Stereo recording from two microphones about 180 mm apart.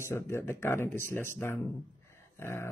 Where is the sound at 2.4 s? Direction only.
15° left (ahead or behind).